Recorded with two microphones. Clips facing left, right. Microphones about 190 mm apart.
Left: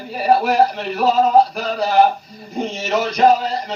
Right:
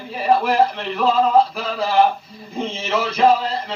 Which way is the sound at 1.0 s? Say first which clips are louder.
Left 2 dB; 40° left (ahead or behind).